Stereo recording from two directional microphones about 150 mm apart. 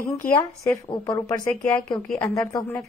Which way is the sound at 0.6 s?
20° left (ahead or behind).